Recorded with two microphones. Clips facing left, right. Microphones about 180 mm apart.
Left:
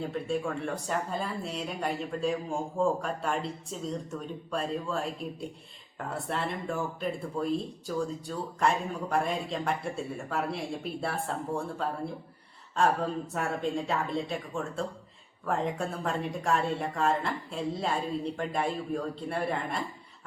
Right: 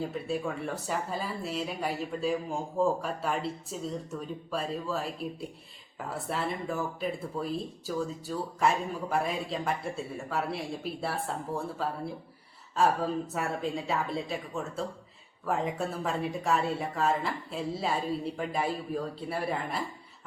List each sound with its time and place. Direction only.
0.0 s speech: 5° right (ahead or behind)